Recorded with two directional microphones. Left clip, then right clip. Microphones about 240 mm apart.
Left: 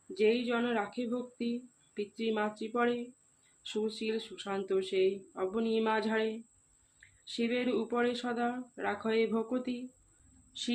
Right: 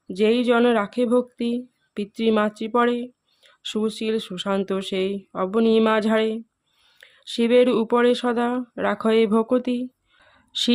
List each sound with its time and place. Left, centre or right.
0.1 s speech: right